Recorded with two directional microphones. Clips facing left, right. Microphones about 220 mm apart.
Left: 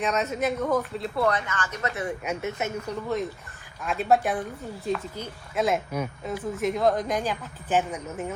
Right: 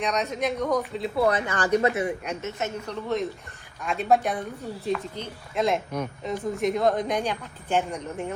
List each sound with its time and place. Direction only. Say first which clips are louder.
0.0 s a woman's voice: left 1 dB; 5° left (ahead or behind)
1.2 s speech: right 3 dB; 25° right (ahead or behind)
2.2 s a woman's voice: left 1 dB; 10° left (ahead or behind)